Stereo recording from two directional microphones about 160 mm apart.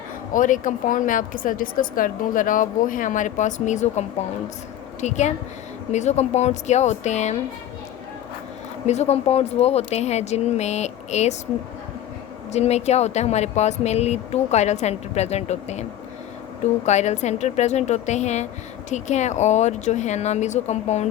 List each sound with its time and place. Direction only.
0.3 s a woman's voice: 55° left (ahead or behind)
8.9 s speech: 45° left (ahead or behind)
12.5 s speech: 45° left (ahead or behind)